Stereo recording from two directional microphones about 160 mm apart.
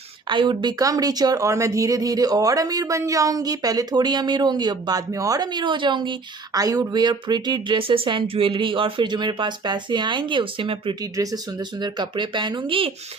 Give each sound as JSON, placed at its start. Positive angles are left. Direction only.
{"t": 0.3, "sound": "speech", "side_deg": -30}
{"t": 11.0, "sound": "speech", "side_deg": -20}